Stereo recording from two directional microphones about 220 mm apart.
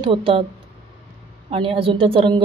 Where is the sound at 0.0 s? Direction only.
25° right (ahead or behind).